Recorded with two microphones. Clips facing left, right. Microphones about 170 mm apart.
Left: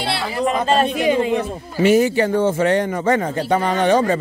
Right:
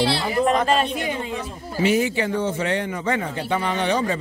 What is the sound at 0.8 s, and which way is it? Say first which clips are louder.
Speech: left 9 dB; 90° left.